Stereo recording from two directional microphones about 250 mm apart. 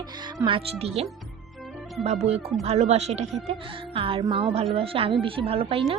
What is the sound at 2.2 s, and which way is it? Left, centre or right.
A woman's voice, right.